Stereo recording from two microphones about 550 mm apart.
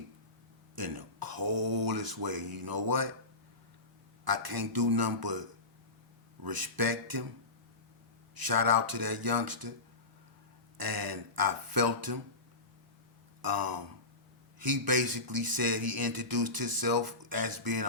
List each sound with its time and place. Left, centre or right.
0.8 s speech: right
4.3 s speech: right
6.4 s speech: right
8.4 s speech: right
10.8 s speech: right
13.4 s speech: right